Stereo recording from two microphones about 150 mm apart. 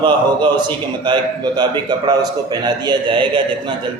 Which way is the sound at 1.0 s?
30° right (ahead or behind).